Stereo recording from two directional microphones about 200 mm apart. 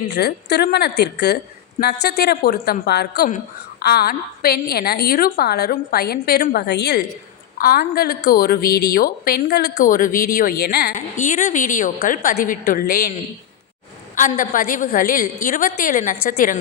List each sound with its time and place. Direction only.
0.1 s a woman's voice: 55° left (ahead or behind)
7.6 s a woman's voice: 45° left (ahead or behind)
9.7 s a woman's voice: 40° left (ahead or behind)
14.2 s a woman's voice: 40° left (ahead or behind)